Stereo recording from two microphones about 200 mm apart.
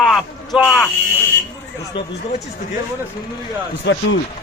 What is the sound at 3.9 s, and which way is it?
Speech, 60° left (ahead or behind).